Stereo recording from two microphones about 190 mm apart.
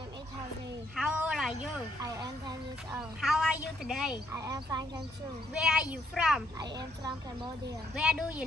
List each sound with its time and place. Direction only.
0.9 s a sound: 10° right (ahead or behind)
2.1 s a sound: 20° right (ahead or behind)
3.0 s a woman's voice: centre (ahead or behind)
4.3 s speech: 15° right (ahead or behind)
5.5 s a woman's voice: 5° right (ahead or behind)
6.6 s speech: 20° right (ahead or behind)
7.9 s a woman's voice: 5° right (ahead or behind)